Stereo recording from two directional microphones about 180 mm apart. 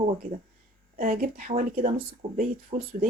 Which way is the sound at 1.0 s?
50° right (ahead or behind).